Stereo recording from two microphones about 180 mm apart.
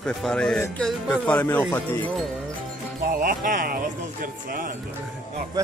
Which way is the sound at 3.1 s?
50° right (ahead or behind).